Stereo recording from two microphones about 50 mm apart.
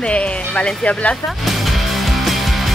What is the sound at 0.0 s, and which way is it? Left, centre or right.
Speech, left.